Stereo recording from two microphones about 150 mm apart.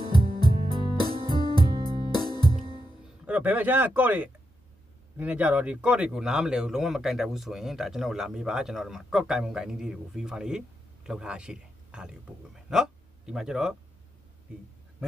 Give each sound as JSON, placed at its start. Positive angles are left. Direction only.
{"t": 0.0, "sound": "music", "side_deg": -30}
{"t": 2.0, "sound": "music", "side_deg": 30}
{"t": 3.3, "sound": "a man's voice", "side_deg": -10}